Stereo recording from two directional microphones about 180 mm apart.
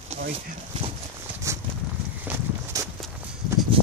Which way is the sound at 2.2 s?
15° right (ahead or behind).